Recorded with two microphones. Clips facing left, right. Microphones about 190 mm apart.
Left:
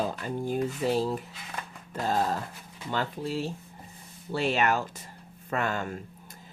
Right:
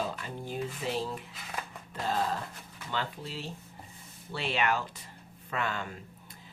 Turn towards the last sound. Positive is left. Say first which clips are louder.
# left 5 dB
turn(degrees=45)  # may be behind; listen again after turning